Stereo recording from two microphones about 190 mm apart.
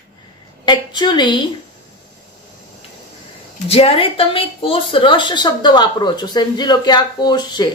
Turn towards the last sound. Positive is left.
turn(degrees=20)  # may be behind; listen again after turning